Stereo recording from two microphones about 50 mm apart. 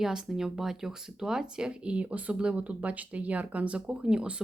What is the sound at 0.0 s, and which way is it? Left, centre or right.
Speech, centre.